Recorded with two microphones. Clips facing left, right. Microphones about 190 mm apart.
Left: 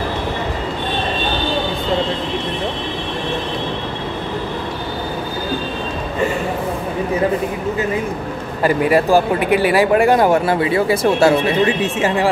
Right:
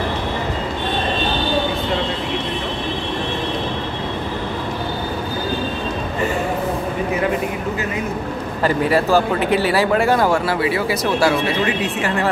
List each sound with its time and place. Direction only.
8.6 s speech: 15° left (ahead or behind)